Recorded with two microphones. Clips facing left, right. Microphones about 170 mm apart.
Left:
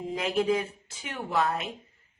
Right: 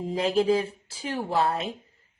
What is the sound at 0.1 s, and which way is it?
Speech, 30° right (ahead or behind).